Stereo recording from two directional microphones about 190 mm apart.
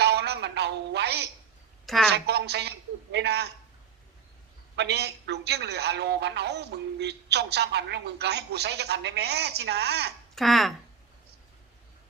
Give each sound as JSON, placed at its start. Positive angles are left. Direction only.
{"t": 0.0, "sound": "a sound", "side_deg": -60}
{"t": 2.1, "sound": "a man's voice", "side_deg": -60}
{"t": 4.8, "sound": "a man's voice", "side_deg": -60}
{"t": 10.3, "sound": "speech", "side_deg": 0}